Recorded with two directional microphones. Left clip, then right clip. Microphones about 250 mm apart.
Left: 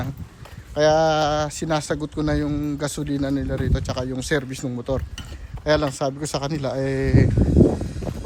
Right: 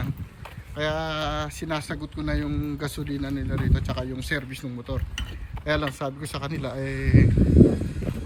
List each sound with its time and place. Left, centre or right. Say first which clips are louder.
0.8 s speech: left 10 dB; centre